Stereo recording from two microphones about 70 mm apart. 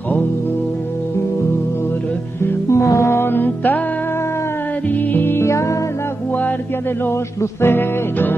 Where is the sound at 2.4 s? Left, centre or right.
Left.